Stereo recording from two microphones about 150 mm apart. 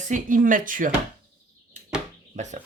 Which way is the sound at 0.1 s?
60° right (ahead or behind).